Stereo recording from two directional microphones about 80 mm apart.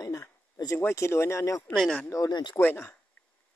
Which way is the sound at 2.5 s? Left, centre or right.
Left.